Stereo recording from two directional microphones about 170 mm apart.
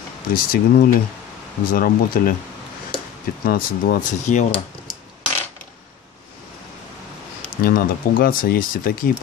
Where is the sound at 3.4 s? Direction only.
60° left (ahead or behind).